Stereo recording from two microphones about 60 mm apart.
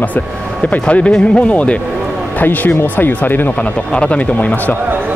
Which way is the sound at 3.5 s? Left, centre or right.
Centre.